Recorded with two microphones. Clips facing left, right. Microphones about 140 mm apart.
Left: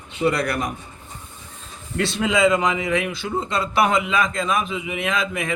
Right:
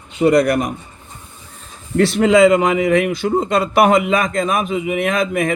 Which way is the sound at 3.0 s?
40° right (ahead or behind).